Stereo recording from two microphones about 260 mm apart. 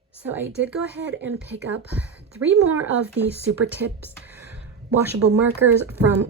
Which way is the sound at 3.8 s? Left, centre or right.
Right.